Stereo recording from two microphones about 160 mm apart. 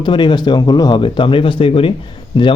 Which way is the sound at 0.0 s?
30° left (ahead or behind).